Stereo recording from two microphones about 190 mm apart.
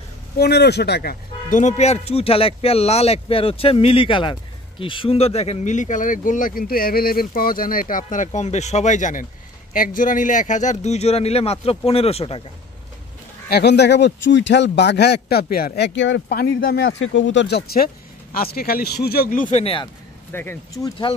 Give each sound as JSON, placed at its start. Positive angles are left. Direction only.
{"t": 0.4, "sound": "speech", "side_deg": 60}
{"t": 1.5, "sound": "speech", "side_deg": 40}
{"t": 13.5, "sound": "speech", "side_deg": 60}
{"t": 16.3, "sound": "speech", "side_deg": 50}
{"t": 19.6, "sound": "speech", "side_deg": 25}
{"t": 20.3, "sound": "speech", "side_deg": 15}